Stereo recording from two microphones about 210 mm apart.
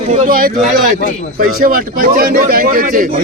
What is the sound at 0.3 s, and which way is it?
A man's voice, 45° right (ahead or behind).